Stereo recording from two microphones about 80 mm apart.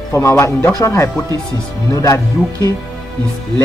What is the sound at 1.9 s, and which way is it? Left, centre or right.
Speech, left.